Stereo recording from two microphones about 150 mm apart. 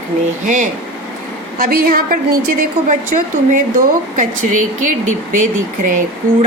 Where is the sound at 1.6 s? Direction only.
75° right (ahead or behind).